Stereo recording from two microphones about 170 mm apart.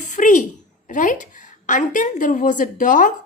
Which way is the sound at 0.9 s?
50° left (ahead or behind).